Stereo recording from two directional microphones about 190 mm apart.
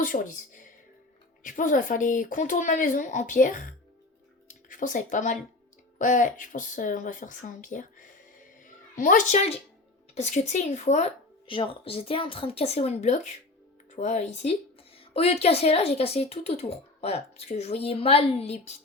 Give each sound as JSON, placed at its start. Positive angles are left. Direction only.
{"t": 0.0, "sound": "speech", "side_deg": 45}
{"t": 4.4, "sound": "a sound", "side_deg": 45}
{"t": 6.0, "sound": "speech", "side_deg": 40}
{"t": 8.6, "sound": "music", "side_deg": 45}
{"t": 10.2, "sound": "a woman's voice", "side_deg": 35}